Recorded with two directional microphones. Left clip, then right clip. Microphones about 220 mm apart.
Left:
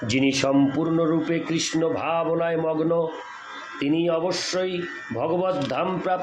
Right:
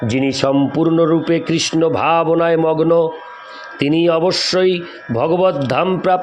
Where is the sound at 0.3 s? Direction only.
35° right (ahead or behind).